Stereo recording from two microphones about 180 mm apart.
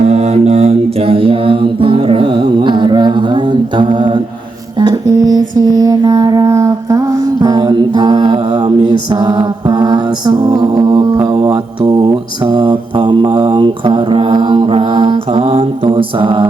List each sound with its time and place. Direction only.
0.0 s mantra: 35° right (ahead or behind)
4.8 s music: 20° right (ahead or behind)
5.5 s mantra: 20° right (ahead or behind)